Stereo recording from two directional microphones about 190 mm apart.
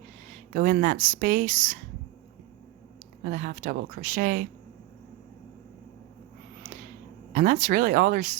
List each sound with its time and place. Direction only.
0.5 s speech: 45° right (ahead or behind)
3.2 s speech: 45° right (ahead or behind)
7.3 s speech: 40° right (ahead or behind)